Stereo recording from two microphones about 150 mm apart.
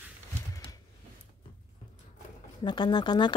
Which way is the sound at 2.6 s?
30° left (ahead or behind).